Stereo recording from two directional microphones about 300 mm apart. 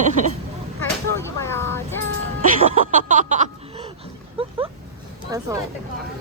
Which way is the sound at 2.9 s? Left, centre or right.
Right.